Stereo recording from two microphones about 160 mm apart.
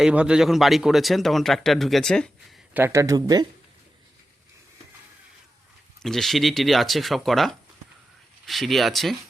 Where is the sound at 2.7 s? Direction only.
15° right (ahead or behind).